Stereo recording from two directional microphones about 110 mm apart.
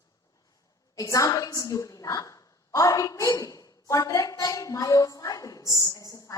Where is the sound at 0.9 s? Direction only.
30° left (ahead or behind).